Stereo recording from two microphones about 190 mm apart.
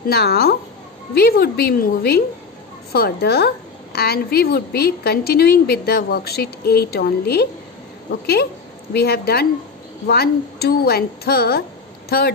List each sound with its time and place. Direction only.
0.0 s a woman's voice: 55° left (ahead or behind)